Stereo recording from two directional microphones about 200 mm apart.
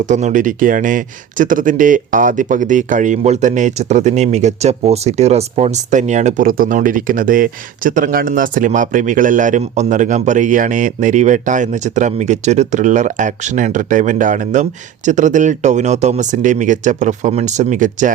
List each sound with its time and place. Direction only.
0.0 s speech: 35° right (ahead or behind)